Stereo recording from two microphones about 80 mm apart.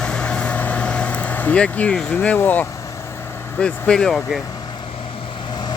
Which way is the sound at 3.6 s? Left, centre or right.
Centre.